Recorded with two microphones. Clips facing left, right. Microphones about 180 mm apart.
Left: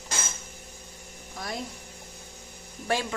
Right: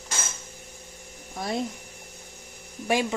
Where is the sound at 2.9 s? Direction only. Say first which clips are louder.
Right 4 dB; 15° right (ahead or behind).